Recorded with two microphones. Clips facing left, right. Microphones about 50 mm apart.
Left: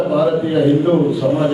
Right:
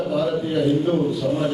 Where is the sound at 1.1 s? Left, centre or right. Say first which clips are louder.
Left 6 dB; centre.